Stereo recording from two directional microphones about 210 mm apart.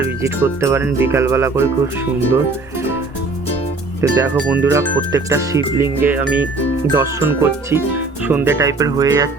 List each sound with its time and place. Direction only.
0.0 s speech: 15° right (ahead or behind)
4.0 s speech: 10° right (ahead or behind)